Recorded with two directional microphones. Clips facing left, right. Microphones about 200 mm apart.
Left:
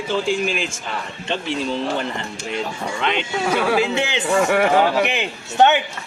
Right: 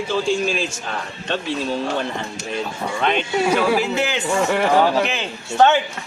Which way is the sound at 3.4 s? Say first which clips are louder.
Right 1 dB; 10° right (ahead or behind).